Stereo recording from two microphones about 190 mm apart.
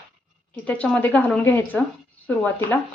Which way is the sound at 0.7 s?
5° left (ahead or behind).